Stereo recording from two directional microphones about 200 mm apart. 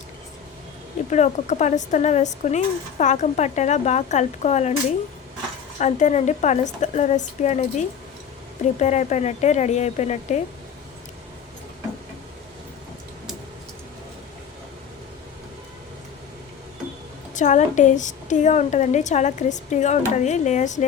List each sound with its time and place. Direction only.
1.1 s speech: 35° left (ahead or behind)
5.8 s speech: 35° left (ahead or behind)
17.3 s speech: 35° left (ahead or behind)